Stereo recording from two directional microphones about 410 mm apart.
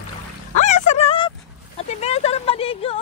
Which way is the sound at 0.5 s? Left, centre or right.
Centre.